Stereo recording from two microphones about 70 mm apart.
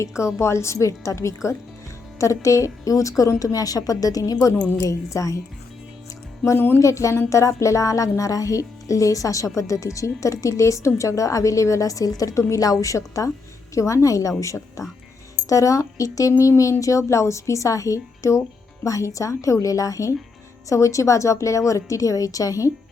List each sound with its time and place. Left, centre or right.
0.3 s a woman's voice: left
4.8 s speech: left
6.7 s speech: left